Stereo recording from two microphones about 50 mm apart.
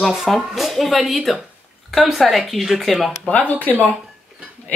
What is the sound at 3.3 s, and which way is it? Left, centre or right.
Speech, left.